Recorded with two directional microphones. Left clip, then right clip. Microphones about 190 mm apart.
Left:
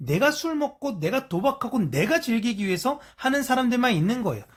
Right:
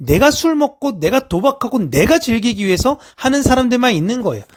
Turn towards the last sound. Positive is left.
turn(degrees=-45)  # may be behind; listen again after turning